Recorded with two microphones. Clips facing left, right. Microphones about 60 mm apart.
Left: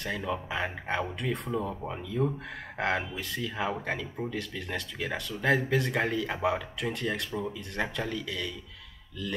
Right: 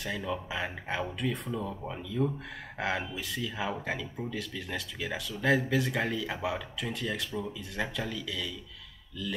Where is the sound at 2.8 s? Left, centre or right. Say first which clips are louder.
Left 2 dB; centre.